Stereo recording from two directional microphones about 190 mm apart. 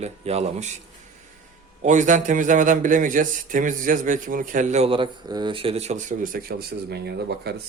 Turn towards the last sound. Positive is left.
turn(degrees=-60)  # may be behind; listen again after turning